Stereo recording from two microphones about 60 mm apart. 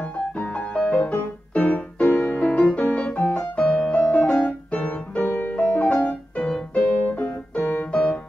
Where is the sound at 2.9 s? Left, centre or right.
Left.